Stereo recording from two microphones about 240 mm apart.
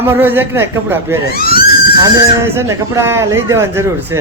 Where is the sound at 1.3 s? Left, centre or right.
Left.